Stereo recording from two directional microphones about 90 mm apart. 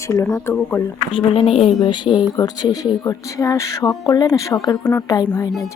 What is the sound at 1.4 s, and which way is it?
Speech, 90° left.